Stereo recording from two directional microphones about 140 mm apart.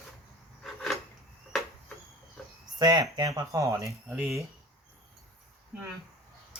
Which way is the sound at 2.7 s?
30° right (ahead or behind).